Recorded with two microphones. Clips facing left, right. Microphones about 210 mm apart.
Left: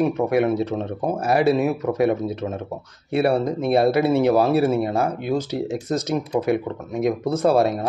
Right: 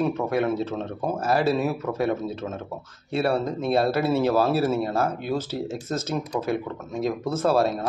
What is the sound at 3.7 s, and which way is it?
Speech, 15° left (ahead or behind).